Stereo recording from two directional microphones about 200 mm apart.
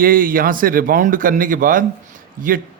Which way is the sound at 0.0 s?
45° right (ahead or behind).